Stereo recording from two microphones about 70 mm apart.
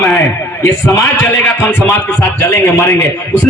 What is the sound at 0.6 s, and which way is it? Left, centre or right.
A man's voice, left.